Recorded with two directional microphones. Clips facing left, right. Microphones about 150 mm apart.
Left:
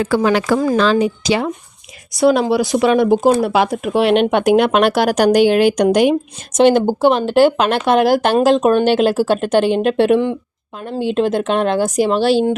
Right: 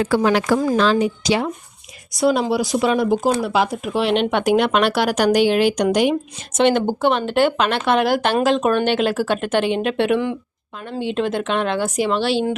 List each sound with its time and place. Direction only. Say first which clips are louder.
0.4 s speech: left 2 dB; 85° left
2.1 s speech: left 4 dB; 65° left (ahead or behind); by 12.5 s 45° left (ahead or behind)